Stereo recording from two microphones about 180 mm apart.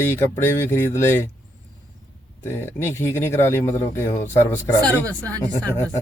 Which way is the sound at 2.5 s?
15° left (ahead or behind).